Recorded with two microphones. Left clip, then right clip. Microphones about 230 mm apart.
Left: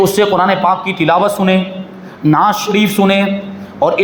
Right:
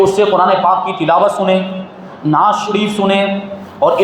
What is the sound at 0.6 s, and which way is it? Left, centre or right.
A man's voice, left.